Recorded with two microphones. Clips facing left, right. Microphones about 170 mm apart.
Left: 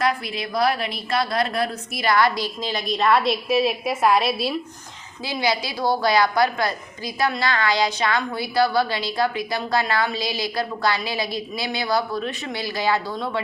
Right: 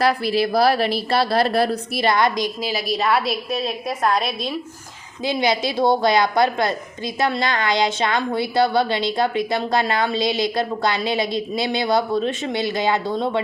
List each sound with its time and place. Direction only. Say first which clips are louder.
0.0 s speech: right 6 dB; 35° right (ahead or behind)
2.6 s a woman's voice: right 1 dB; 5° right (ahead or behind)
5.2 s a woman's voice: right 4 dB; 20° right (ahead or behind)